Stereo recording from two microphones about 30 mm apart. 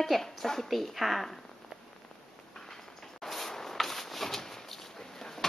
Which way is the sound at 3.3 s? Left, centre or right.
Centre.